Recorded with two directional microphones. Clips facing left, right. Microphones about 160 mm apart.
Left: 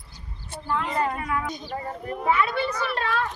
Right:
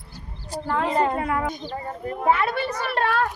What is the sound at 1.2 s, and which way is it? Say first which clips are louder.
Speech: right 3 dB; 55° right (ahead or behind).